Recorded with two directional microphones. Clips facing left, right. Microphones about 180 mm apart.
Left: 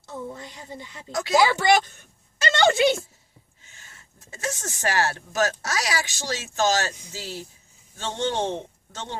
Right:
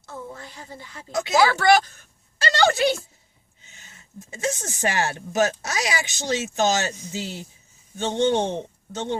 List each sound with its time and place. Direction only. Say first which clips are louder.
0.0 s a woman's voice: left 2 dB; 20° left (ahead or behind)
3.6 s a man's voice: right 3 dB; 20° right (ahead or behind)